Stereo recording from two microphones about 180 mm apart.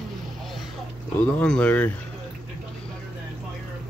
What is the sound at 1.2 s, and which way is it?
Speech, 5° left (ahead or behind).